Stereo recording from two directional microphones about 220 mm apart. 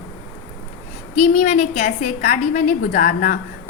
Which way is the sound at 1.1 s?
35° left (ahead or behind).